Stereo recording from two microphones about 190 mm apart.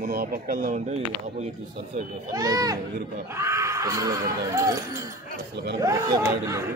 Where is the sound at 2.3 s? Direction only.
20° right (ahead or behind).